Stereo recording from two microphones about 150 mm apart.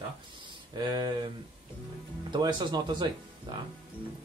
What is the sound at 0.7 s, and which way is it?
Speech, 30° right (ahead or behind).